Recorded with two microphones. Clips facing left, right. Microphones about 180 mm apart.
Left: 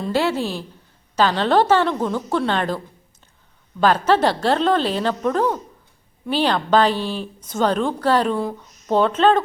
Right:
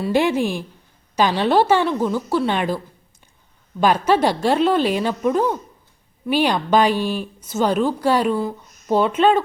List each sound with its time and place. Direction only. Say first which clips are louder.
0.0 s speech: right 3 dB; 15° right (ahead or behind)